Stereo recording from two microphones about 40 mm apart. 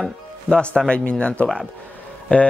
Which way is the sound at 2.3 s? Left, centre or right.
Left.